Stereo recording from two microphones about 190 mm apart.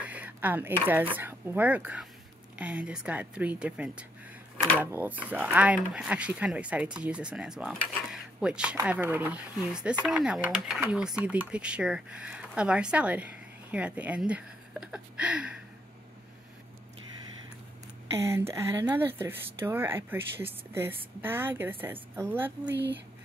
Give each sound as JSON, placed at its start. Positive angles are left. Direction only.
{"t": 0.0, "sound": "a sound", "side_deg": -10}
{"t": 1.1, "sound": "speech", "side_deg": -10}
{"t": 7.8, "sound": "dishes", "side_deg": -5}
{"t": 8.8, "sound": "speech", "side_deg": -10}
{"t": 18.1, "sound": "speech", "side_deg": -15}
{"t": 22.7, "sound": "speech", "side_deg": -65}